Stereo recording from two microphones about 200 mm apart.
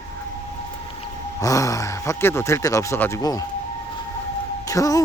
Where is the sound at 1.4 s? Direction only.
15° left (ahead or behind).